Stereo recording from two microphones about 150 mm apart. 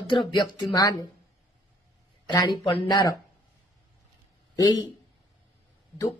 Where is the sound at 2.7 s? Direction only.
30° left (ahead or behind).